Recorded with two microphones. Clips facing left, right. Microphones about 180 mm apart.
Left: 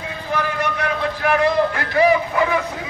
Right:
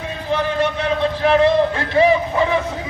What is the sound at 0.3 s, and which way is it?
A man's voice, 25° right (ahead or behind).